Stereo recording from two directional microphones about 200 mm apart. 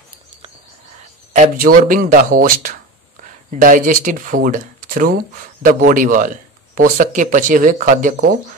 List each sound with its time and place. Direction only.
1.3 s speech: 40° right (ahead or behind)